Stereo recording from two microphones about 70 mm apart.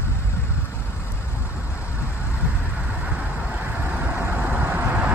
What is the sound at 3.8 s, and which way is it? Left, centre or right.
Vehicle, right.